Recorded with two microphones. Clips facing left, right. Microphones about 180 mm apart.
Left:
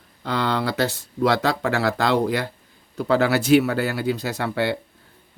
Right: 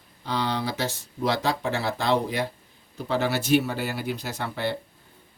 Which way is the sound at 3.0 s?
85° left.